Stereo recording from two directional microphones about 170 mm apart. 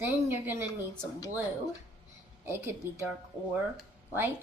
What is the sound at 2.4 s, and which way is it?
A woman's voice, 15° right (ahead or behind).